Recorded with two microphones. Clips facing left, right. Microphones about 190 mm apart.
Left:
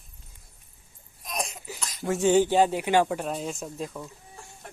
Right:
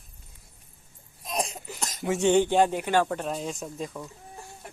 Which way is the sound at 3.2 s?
Centre (ahead or behind).